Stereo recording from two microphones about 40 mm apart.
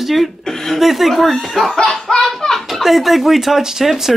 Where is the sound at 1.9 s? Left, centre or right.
Centre.